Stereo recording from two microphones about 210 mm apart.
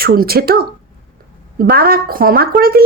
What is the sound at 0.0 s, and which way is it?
A woman's voice, 45° right (ahead or behind).